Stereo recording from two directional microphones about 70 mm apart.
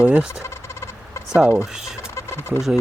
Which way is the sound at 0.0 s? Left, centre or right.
Centre.